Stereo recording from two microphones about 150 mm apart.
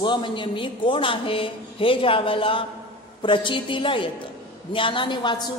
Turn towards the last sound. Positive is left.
turn(degrees=30)  # may be behind; listen again after turning